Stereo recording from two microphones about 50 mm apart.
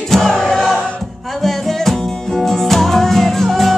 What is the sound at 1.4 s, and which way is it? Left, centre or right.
Music, centre.